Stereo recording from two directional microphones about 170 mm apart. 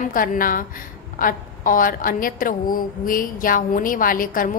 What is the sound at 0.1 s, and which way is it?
A woman's voice, 55° left (ahead or behind).